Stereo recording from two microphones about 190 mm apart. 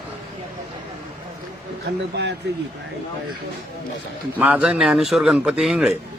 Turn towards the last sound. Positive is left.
turn(degrees=-5)  # may be behind; listen again after turning